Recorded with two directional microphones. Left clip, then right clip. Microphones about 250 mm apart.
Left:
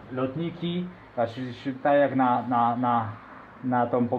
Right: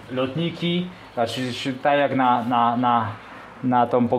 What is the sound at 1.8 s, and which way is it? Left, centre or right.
Speech, right.